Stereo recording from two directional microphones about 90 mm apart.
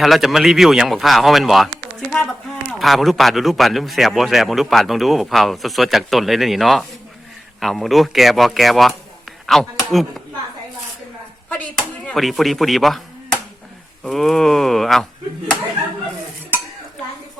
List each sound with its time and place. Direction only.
0.0 s speech: centre (ahead or behind)
2.7 s speech: centre (ahead or behind)
11.4 s a sound: 15° left (ahead or behind)
12.1 s speech: centre (ahead or behind)